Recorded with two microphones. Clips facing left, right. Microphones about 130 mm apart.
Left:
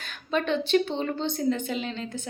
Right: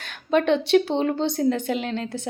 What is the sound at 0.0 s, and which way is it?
A woman's voice, 70° right (ahead or behind).